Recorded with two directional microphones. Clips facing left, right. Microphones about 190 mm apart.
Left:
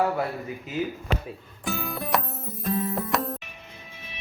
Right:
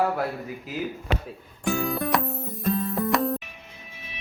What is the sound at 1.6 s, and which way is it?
Music, centre (ahead or behind).